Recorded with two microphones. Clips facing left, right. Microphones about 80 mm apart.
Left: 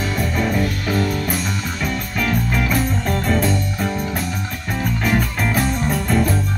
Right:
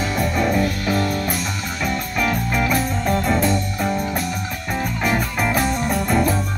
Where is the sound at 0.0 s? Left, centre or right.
Centre.